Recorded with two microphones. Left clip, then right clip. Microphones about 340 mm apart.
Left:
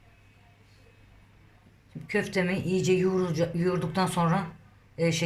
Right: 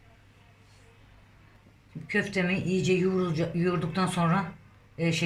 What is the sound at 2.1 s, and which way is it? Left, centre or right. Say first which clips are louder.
Speech: even; centre.